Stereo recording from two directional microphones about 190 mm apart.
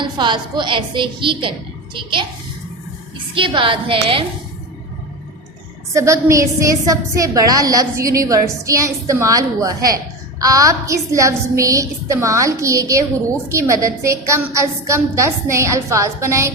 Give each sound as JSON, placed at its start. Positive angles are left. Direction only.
{"t": 0.0, "sound": "a woman's voice", "side_deg": -25}
{"t": 3.3, "sound": "a woman's voice", "side_deg": -25}
{"t": 5.9, "sound": "a woman's voice", "side_deg": -15}